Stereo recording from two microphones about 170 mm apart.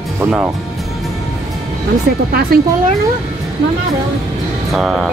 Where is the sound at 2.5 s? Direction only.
60° right (ahead or behind).